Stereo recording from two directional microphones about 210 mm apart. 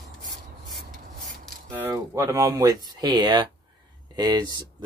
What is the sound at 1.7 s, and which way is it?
Speech, 10° right (ahead or behind).